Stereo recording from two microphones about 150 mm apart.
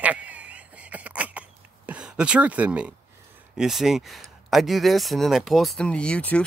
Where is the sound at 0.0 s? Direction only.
10° right (ahead or behind).